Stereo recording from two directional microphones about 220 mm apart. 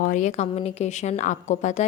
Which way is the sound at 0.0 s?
35° left (ahead or behind).